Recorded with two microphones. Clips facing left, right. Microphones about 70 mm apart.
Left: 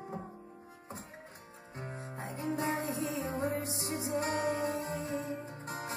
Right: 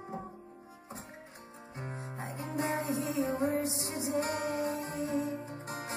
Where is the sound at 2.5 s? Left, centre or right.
Right.